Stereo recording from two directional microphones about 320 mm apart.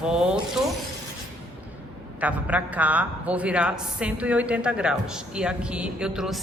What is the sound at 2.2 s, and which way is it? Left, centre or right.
A woman's voice, centre.